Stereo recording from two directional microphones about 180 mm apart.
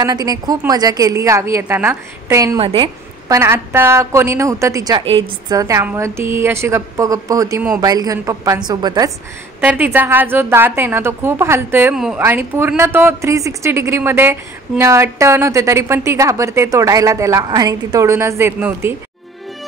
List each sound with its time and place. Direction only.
0.0 s a woman's voice: 20° right (ahead or behind)
3.3 s a woman's voice: 15° right (ahead or behind)
9.6 s speech: 10° right (ahead or behind)